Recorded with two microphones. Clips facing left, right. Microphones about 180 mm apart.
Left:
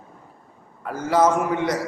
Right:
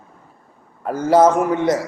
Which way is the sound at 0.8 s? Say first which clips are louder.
Right 6 dB; 30° right (ahead or behind).